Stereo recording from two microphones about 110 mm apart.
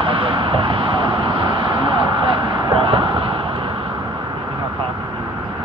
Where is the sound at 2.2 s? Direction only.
55° right (ahead or behind).